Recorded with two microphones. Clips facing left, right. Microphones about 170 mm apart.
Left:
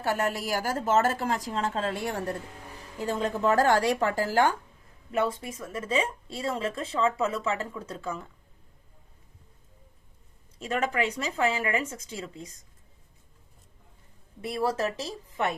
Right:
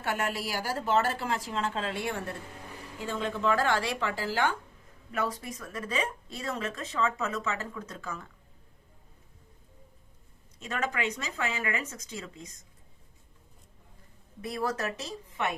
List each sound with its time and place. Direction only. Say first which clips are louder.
0.0 s a woman's voice: left 4 dB; 40° left (ahead or behind)
5.1 s speech: left 5 dB; 25° left (ahead or behind)
10.6 s a woman's voice: left 4 dB; 30° left (ahead or behind)
14.4 s speech: left 4 dB; 30° left (ahead or behind)